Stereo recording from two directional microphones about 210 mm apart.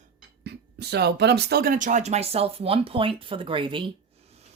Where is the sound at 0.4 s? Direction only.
50° right (ahead or behind).